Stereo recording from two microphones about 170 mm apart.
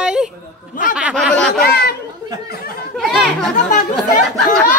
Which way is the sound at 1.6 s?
65° left (ahead or behind).